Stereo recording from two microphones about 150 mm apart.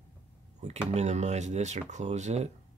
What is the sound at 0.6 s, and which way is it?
Speech, 50° right (ahead or behind).